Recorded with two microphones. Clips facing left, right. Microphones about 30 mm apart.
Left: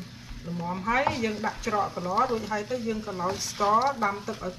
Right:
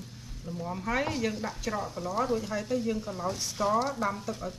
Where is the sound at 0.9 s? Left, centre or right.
Left.